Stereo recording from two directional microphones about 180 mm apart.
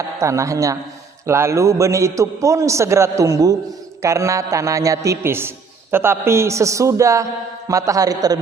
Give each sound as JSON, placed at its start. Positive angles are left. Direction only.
{"t": 0.2, "sound": "a man's voice", "side_deg": -15}